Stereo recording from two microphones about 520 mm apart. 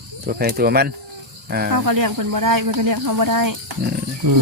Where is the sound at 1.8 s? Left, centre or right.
Right.